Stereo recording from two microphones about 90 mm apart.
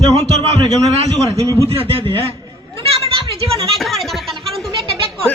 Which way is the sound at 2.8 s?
85° right.